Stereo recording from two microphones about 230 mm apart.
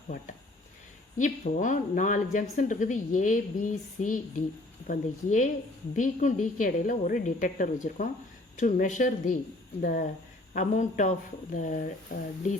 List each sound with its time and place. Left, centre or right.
1.2 s a woman's voice: left